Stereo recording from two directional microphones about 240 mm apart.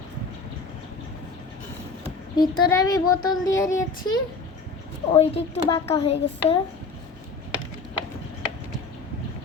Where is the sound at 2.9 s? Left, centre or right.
Centre.